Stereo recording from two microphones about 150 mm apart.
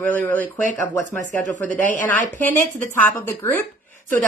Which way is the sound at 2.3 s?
15° left (ahead or behind).